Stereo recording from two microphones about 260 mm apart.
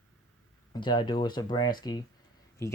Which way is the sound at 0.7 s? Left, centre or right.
Centre.